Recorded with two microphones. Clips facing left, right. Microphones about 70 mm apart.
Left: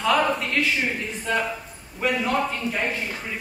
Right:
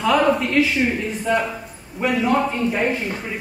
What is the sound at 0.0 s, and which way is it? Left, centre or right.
A man's voice, centre.